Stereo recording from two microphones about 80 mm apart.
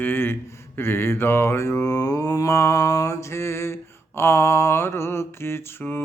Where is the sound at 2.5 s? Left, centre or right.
Left.